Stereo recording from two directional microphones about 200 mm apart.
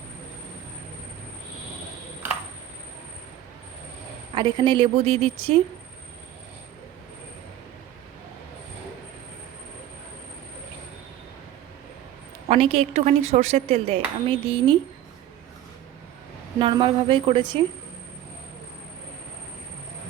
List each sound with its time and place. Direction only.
4.4 s speech: 25° right (ahead or behind)
12.5 s speech: 30° right (ahead or behind)
16.6 s speech: 25° right (ahead or behind)